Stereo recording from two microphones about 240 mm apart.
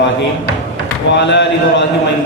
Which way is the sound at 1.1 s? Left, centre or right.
Left.